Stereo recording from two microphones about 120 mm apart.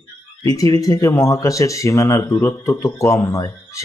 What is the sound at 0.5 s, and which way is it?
Speech, 30° left (ahead or behind).